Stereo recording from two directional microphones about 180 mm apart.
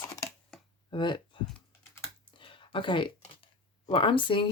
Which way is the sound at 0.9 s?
25° left (ahead or behind).